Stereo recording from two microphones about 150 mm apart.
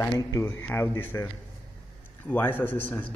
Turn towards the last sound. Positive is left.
turn(degrees=10)  # may be behind; listen again after turning